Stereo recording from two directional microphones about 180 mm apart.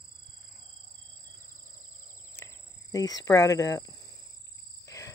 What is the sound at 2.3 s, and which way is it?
Cricket, 15° left (ahead or behind).